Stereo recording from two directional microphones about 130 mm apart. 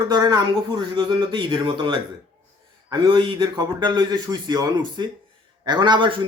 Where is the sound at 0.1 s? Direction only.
30° right (ahead or behind).